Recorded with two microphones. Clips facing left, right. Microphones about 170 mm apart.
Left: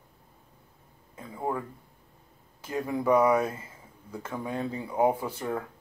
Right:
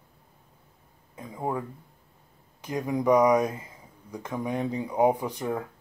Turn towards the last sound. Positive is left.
turn(degrees=-15)  # may be behind; listen again after turning